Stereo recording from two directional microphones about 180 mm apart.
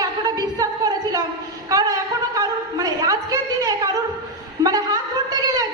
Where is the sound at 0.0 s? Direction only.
20° right (ahead or behind).